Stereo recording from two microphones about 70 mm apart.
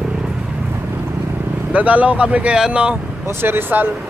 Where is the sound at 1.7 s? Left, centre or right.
Centre.